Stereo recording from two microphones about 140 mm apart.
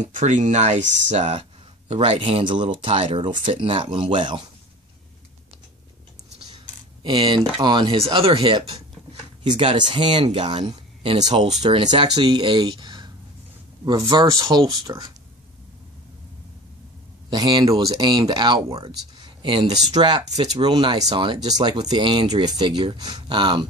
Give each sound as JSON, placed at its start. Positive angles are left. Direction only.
{"t": 0.0, "sound": "speech", "side_deg": -60}
{"t": 7.0, "sound": "speech", "side_deg": -35}
{"t": 17.3, "sound": "speech", "side_deg": -35}